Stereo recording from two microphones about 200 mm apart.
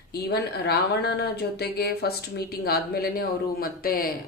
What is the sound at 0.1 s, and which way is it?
Speech, 55° left (ahead or behind).